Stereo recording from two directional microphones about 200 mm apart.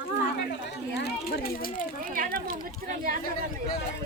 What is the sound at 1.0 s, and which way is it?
Speech, 50° left (ahead or behind).